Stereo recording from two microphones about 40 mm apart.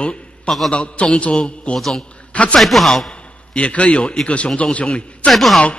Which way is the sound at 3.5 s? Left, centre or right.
Left.